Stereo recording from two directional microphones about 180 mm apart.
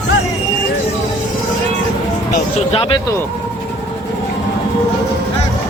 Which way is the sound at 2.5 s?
30° left (ahead or behind).